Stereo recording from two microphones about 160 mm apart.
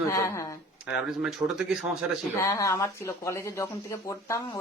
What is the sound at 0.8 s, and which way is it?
Speech, 5° right (ahead or behind).